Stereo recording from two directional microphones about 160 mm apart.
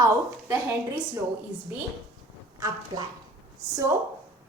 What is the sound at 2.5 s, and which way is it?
Speech, 20° right (ahead or behind).